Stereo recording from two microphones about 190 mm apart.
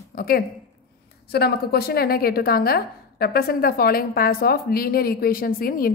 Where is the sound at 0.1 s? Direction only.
50° left (ahead or behind).